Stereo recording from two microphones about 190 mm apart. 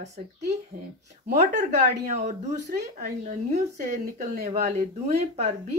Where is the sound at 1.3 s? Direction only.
40° right (ahead or behind).